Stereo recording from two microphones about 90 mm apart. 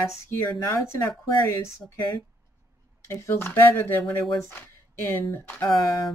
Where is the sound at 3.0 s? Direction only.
30° left (ahead or behind).